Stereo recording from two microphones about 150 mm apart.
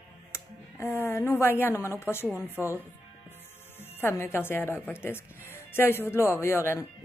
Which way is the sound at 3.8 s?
15° left (ahead or behind).